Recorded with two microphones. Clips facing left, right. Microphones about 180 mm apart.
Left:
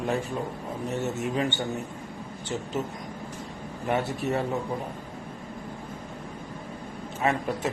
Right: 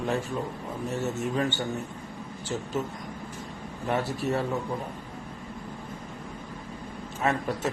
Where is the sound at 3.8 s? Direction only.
20° left (ahead or behind).